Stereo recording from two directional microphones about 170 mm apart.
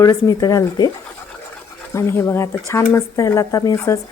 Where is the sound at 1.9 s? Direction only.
15° left (ahead or behind).